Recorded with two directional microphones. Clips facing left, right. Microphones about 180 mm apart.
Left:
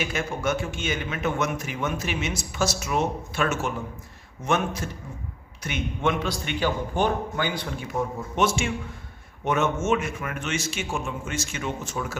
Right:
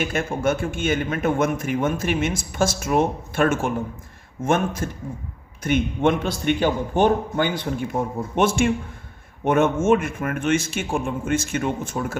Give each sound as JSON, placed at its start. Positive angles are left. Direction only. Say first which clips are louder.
{"t": 0.0, "sound": "a man's voice", "louder": "right 5 dB", "side_deg": -50}